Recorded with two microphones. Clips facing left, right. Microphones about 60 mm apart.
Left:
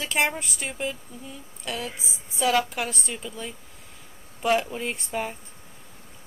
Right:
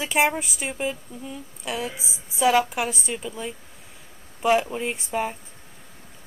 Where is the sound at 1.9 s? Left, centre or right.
Right.